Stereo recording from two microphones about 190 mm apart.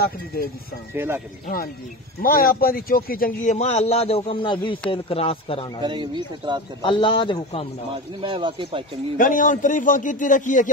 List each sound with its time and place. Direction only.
0.9 s speech: 10° right (ahead or behind)
2.2 s a man's voice: 50° left (ahead or behind)
3.5 s a man's voice: 35° left (ahead or behind)
5.8 s speech: 25° right (ahead or behind)
6.8 s a man's voice: 25° left (ahead or behind)
7.9 s speech: 25° right (ahead or behind)
9.2 s a man's voice: 45° left (ahead or behind)